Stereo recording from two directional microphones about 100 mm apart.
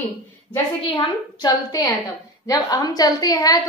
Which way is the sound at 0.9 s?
50° left (ahead or behind).